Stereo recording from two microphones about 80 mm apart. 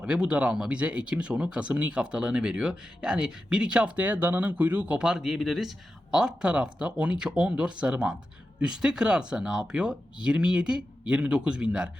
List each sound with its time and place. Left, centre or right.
0.0 s speech: centre